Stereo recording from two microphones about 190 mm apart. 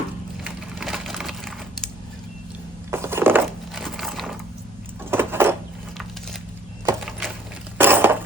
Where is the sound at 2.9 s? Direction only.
10° right (ahead or behind).